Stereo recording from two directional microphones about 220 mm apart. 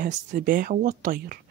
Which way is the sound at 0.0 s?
40° right (ahead or behind).